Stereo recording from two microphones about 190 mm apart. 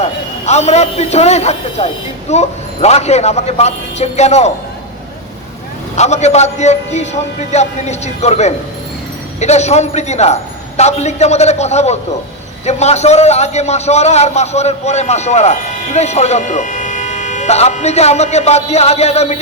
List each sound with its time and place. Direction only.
0.0 s a man's voice: 35° left (ahead or behind)
6.0 s a man's voice: 35° left (ahead or behind)